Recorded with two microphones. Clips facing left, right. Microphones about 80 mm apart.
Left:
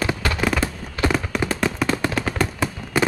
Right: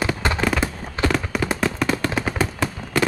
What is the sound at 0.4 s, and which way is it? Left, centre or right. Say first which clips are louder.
Fireworks: even; centre.